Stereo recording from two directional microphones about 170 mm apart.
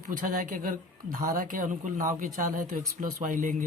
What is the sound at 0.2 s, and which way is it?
Speech, 55° right (ahead or behind).